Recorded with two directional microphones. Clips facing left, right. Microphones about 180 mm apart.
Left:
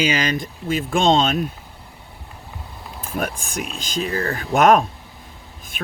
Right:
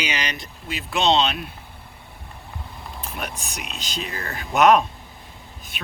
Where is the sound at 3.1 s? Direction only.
50° left (ahead or behind).